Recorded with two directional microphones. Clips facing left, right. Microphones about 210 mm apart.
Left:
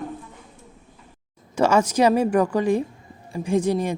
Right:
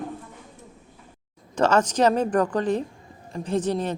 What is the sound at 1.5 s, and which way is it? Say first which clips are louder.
Speech: left 2 dB; 10° left (ahead or behind).